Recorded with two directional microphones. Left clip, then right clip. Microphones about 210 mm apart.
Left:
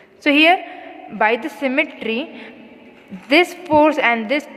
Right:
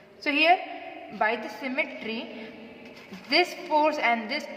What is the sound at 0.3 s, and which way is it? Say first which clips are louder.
A woman's voice: left 8 dB; 45° left (ahead or behind).